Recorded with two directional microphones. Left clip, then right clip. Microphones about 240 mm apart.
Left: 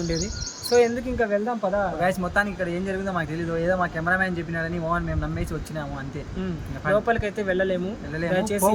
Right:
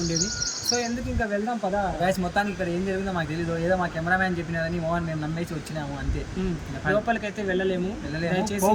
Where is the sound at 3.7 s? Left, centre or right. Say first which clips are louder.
Left 1 dB; left.